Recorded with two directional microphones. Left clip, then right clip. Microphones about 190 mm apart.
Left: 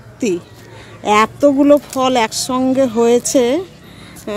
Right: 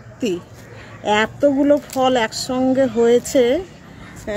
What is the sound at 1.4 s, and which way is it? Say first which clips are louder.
Speech: left 3 dB; 45° left (ahead or behind).